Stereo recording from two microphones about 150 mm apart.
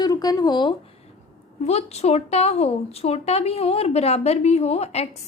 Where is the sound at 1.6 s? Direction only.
45° left (ahead or behind).